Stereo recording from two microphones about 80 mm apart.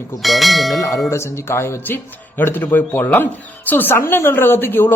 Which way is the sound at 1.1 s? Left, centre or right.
Left.